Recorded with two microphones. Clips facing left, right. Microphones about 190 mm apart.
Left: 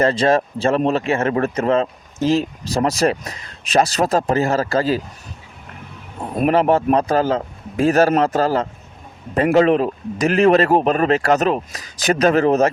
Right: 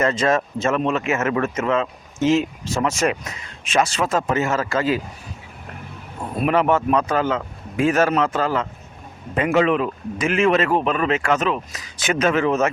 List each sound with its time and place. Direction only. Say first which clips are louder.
0.0 s speech: left 3 dB; 35° left (ahead or behind)
6.4 s speech: left 3 dB; 35° left (ahead or behind)